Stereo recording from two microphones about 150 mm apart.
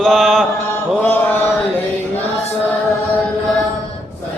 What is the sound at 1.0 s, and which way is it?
Mantra, 15° left (ahead or behind).